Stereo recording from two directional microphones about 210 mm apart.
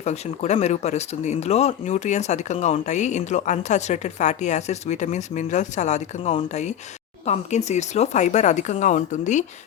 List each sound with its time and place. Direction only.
0.0 s speech: 30° left (ahead or behind)